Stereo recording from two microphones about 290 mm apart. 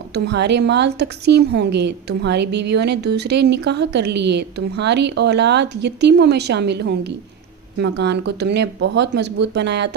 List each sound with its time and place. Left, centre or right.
0.1 s a woman's voice: right